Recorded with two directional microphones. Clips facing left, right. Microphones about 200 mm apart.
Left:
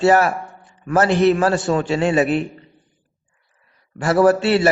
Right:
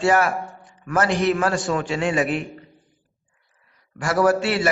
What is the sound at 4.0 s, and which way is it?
Speech, 25° left (ahead or behind).